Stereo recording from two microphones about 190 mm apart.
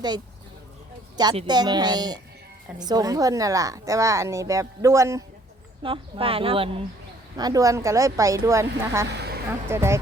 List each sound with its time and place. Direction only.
1.1 s a woman's voice: 20° right (ahead or behind)
5.8 s a woman's voice: 30° right (ahead or behind)
9.0 s a sound: 60° right (ahead or behind)
9.5 s speech: 15° right (ahead or behind)